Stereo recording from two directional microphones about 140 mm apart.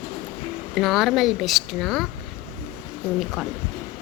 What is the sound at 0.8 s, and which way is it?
A woman's voice, centre (ahead or behind).